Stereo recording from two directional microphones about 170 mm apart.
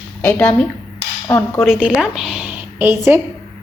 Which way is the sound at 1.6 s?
5° right (ahead or behind).